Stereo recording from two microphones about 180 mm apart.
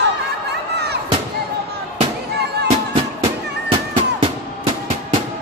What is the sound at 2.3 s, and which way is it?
Music, 65° right (ahead or behind).